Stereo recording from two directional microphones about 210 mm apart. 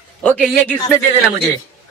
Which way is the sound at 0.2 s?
Centre (ahead or behind).